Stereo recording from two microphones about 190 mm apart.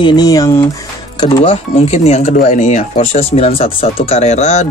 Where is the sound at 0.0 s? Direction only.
20° left (ahead or behind).